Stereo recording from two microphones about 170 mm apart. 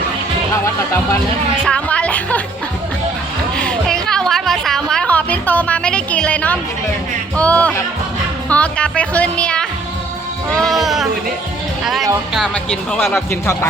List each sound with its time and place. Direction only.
1.6 s speech: 5° left (ahead or behind)
3.6 s music: 5° left (ahead or behind)
7.3 s a woman's voice: 10° left (ahead or behind)
12.9 s speech: centre (ahead or behind)
13.1 s a woman's voice: 15° left (ahead or behind)